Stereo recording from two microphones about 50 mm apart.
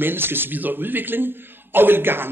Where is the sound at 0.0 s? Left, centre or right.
Right.